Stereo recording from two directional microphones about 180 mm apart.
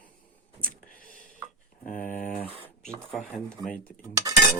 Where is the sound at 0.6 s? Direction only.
30° right (ahead or behind).